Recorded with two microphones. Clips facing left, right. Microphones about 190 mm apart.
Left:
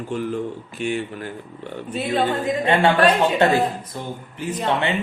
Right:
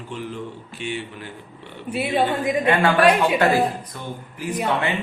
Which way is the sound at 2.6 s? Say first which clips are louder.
Left 2 dB; 25° left (ahead or behind).